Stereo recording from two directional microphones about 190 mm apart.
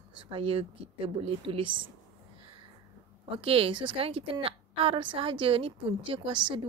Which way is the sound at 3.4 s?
30° right (ahead or behind).